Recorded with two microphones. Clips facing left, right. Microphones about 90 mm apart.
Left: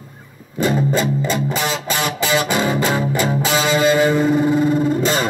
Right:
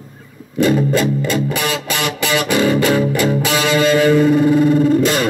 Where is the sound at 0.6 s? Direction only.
20° left (ahead or behind).